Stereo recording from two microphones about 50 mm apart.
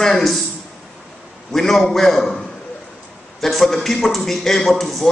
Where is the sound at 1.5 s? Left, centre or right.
Centre.